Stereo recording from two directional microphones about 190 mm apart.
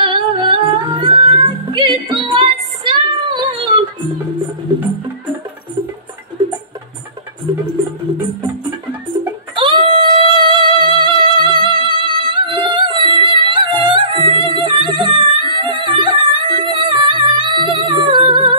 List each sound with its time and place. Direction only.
0.0 s singing: 25° right (ahead or behind)
9.6 s music: 25° right (ahead or behind)